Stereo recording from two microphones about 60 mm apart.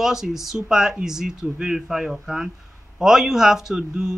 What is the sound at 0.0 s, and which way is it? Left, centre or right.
Speech, centre.